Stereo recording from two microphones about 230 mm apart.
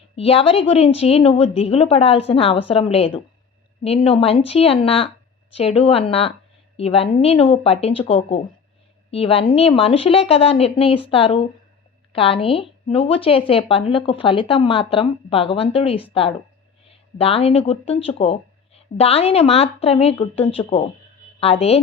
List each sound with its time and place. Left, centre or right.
0.2 s a woman's voice: left